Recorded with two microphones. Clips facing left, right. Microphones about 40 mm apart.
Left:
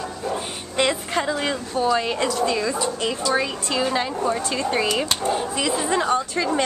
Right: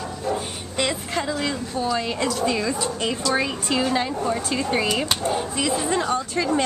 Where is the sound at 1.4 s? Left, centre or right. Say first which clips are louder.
Left 2 dB; centre.